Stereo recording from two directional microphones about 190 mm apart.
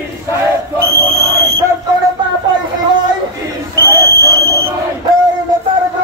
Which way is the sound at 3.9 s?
15° right (ahead or behind).